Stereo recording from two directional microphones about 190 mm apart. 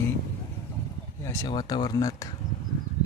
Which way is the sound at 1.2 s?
20° left (ahead or behind).